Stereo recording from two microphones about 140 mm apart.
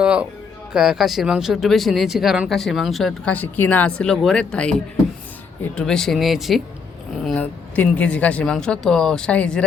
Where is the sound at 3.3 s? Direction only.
10° left (ahead or behind).